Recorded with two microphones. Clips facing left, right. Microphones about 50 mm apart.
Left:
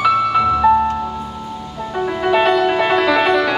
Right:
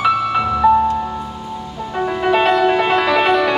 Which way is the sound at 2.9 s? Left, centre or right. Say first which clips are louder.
Left 1 dB; right.